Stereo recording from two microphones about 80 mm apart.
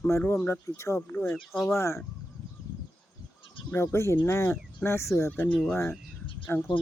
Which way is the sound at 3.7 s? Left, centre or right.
Left.